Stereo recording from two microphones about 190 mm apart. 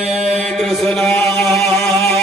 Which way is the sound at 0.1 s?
Centre (ahead or behind).